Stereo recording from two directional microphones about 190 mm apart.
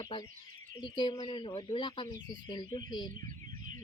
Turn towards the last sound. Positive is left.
turn(degrees=20)  # may be behind; listen again after turning